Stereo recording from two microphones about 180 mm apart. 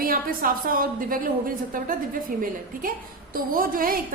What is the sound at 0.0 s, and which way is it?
A woman's voice, 50° right (ahead or behind).